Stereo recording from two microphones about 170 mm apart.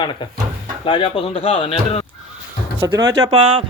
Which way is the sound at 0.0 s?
25° left (ahead or behind).